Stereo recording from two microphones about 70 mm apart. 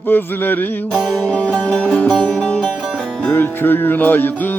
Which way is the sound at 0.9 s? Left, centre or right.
Centre.